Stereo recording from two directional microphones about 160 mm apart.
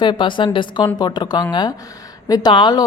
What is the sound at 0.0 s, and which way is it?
A woman's voice, 30° left (ahead or behind).